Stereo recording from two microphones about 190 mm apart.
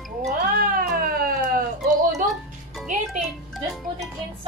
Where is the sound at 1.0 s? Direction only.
50° right (ahead or behind).